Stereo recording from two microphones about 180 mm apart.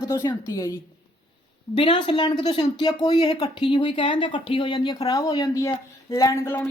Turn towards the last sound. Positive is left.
turn(degrees=10)  # may be behind; listen again after turning